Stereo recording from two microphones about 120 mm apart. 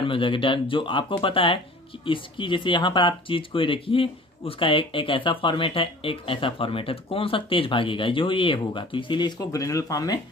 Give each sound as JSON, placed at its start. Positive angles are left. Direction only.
{"t": 0.0, "sound": "speech", "side_deg": 45}